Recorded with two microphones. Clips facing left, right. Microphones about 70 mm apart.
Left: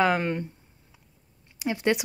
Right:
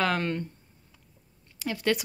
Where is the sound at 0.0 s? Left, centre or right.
Centre.